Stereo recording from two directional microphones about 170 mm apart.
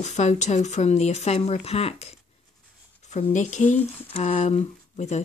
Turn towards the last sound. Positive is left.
turn(degrees=40)  # may be behind; listen again after turning